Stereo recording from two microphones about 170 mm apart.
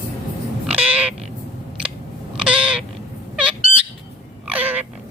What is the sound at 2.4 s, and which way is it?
Owl, 5° right (ahead or behind).